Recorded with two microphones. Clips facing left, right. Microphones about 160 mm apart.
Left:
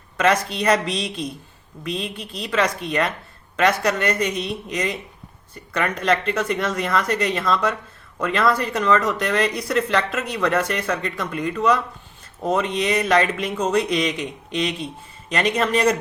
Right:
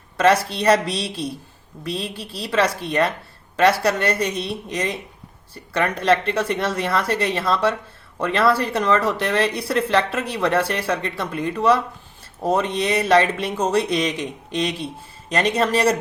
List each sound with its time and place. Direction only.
0.2 s speech: 30° right (ahead or behind)